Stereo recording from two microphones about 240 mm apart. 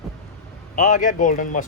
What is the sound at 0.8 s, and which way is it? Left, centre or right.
Speech, left.